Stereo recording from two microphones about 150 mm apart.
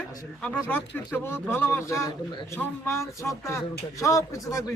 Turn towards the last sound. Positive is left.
turn(degrees=20)  # may be behind; listen again after turning